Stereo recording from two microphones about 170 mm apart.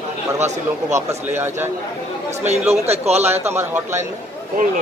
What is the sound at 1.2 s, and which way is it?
Speech, 15° right (ahead or behind).